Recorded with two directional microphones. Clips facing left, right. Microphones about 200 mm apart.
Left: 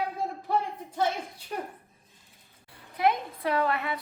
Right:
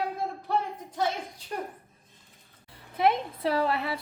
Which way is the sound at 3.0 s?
25° right (ahead or behind).